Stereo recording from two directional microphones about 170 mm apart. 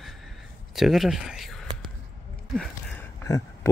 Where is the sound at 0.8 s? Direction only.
Centre (ahead or behind).